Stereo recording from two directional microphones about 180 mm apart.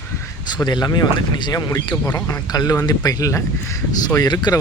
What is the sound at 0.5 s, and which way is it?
Speech, 25° left (ahead or behind).